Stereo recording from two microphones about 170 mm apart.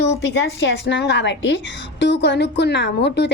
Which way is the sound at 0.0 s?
90° left.